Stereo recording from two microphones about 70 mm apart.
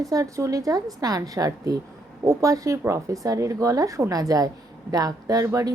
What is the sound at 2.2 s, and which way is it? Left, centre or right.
Speech, right.